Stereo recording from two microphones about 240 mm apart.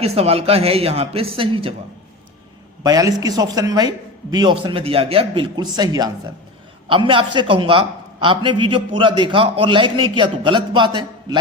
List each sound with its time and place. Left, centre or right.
0.0 s a man's voice: right
2.8 s a man's voice: centre